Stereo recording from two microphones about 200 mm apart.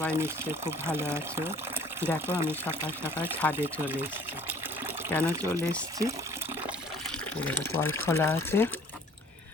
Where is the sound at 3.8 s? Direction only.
10° right (ahead or behind).